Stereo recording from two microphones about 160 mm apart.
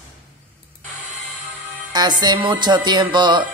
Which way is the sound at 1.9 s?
25° right (ahead or behind).